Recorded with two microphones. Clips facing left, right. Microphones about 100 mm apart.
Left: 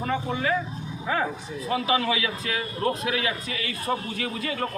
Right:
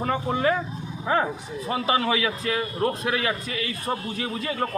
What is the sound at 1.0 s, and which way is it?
A man's voice, 35° right (ahead or behind).